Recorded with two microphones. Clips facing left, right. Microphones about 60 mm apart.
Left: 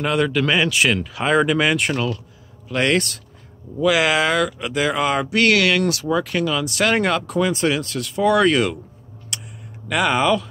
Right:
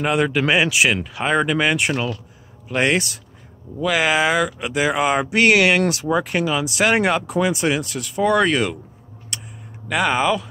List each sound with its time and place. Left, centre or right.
0.0 s speech: centre
3.8 s speech: centre
9.8 s speech: centre